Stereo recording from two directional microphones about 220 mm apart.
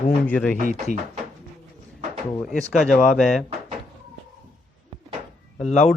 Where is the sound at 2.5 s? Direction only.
Centre (ahead or behind).